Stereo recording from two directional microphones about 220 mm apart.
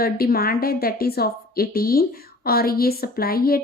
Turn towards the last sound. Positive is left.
turn(degrees=45)  # may be behind; listen again after turning